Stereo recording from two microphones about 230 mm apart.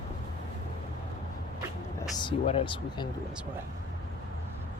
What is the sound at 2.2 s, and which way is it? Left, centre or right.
Speech, left.